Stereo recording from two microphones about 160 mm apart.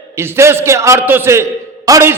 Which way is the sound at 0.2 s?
15° right (ahead or behind).